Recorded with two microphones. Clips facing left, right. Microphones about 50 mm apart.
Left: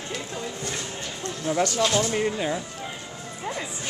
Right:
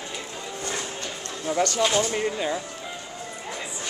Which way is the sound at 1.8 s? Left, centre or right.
Centre.